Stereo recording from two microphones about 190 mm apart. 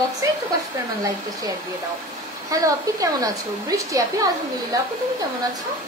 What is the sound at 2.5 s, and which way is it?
Speech, 20° right (ahead or behind).